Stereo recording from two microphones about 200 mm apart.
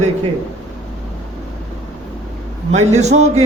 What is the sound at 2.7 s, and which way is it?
Speech, 35° right (ahead or behind).